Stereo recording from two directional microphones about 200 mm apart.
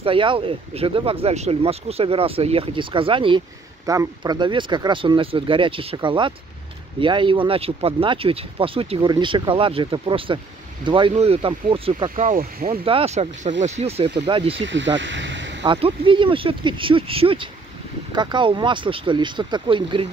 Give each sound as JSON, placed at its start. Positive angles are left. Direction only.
{"t": 0.0, "sound": "speech", "side_deg": -25}
{"t": 12.2, "sound": "speech", "side_deg": -45}
{"t": 12.8, "sound": "speech", "side_deg": -30}
{"t": 14.6, "sound": "speech", "side_deg": -65}
{"t": 15.0, "sound": "a sound", "side_deg": -65}
{"t": 15.6, "sound": "speech", "side_deg": -25}